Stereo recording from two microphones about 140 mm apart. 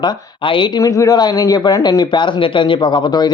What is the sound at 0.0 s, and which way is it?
A man's voice, 35° left (ahead or behind).